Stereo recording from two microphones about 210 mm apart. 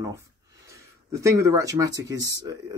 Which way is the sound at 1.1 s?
15° right (ahead or behind).